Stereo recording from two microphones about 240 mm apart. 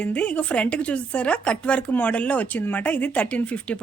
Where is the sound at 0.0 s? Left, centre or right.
Centre.